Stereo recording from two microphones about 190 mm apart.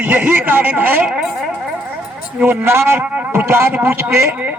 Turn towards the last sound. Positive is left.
turn(degrees=-10)  # may be behind; listen again after turning